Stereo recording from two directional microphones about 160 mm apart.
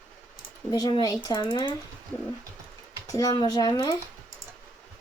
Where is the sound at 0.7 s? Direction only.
25° left (ahead or behind).